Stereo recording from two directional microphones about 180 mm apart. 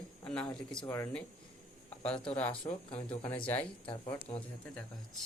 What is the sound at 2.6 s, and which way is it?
Speech, 30° left (ahead or behind).